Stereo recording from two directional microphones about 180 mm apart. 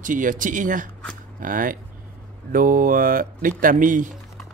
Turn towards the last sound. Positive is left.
turn(degrees=-50)  # may be behind; listen again after turning